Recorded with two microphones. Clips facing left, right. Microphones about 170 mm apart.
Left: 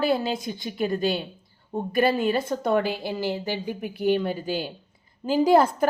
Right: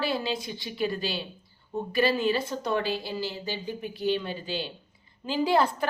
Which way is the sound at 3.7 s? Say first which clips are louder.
Left 5 dB; 55° left (ahead or behind).